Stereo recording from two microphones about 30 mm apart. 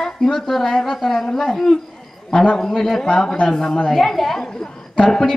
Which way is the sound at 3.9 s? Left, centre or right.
Centre.